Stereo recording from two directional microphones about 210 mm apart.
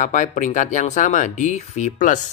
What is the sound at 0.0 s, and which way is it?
A man's voice, 35° left (ahead or behind).